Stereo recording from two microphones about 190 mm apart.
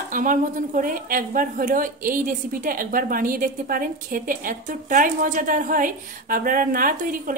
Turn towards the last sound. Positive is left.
turn(degrees=-45)  # may be behind; listen again after turning